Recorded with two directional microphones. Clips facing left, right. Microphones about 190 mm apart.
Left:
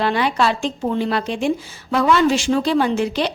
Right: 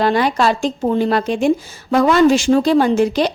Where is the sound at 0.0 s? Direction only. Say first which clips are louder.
Right 3 dB; 40° right (ahead or behind).